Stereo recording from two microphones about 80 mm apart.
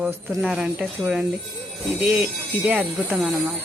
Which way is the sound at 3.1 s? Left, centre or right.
Centre.